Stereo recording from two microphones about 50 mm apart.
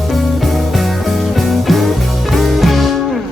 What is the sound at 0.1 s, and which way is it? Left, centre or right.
Music, centre.